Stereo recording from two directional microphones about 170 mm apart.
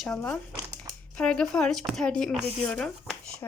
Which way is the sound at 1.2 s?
5° left (ahead or behind).